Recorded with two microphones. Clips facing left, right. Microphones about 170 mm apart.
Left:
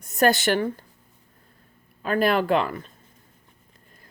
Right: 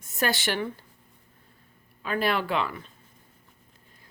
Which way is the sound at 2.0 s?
45° left (ahead or behind).